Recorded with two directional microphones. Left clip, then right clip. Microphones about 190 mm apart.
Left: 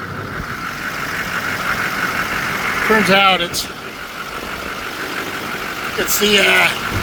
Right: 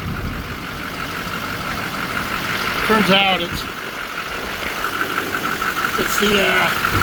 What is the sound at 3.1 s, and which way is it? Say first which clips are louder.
Speech: left 3 dB; 45° left (ahead or behind).